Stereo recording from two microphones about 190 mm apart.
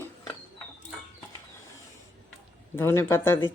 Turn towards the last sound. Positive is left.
turn(degrees=15)  # may be behind; listen again after turning